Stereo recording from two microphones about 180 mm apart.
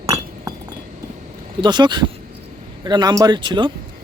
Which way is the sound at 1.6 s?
25° right (ahead or behind).